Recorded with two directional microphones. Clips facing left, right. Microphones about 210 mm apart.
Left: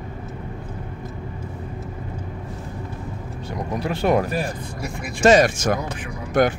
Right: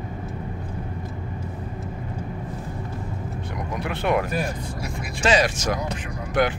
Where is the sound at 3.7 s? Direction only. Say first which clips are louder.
Left 4 dB; 35° left (ahead or behind).